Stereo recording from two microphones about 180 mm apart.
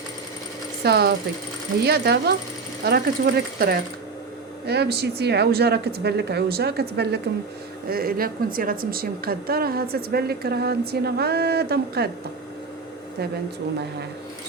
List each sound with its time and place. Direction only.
0.9 s a woman's voice: 60° right (ahead or behind)